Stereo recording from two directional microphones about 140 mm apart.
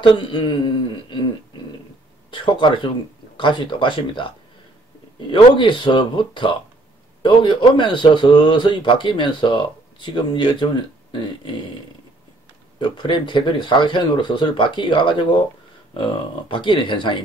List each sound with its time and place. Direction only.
0.0 s speech: 35° left (ahead or behind)
2.3 s speech: 35° left (ahead or behind)
5.3 s speech: 35° left (ahead or behind)
12.7 s speech: 35° left (ahead or behind)